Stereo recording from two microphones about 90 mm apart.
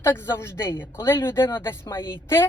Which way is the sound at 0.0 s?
25° left (ahead or behind).